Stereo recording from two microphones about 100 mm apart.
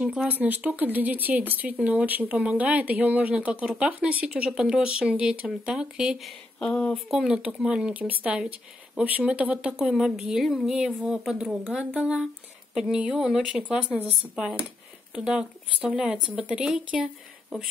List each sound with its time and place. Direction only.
0.0 s speech: 10° right (ahead or behind)
6.7 s speech: 10° left (ahead or behind)
7.1 s speech: 5° right (ahead or behind)